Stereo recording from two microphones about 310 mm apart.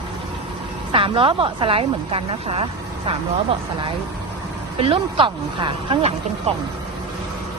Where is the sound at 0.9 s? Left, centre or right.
Centre.